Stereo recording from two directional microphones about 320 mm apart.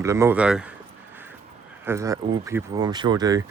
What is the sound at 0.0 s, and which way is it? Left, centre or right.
Speech, centre.